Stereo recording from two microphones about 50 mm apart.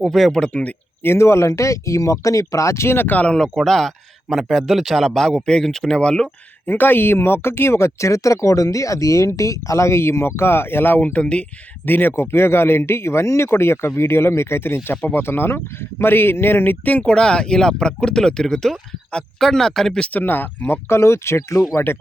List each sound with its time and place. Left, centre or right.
0.0 s speech: centre
0.4 s speech: left
1.0 s speech: left
3.1 s speech: left
3.3 s speech: centre
6.7 s speech: left
11.1 s speech: left
11.9 s speech: left
12.1 s speech: left
17.0 s speech: centre
20.1 s speech: left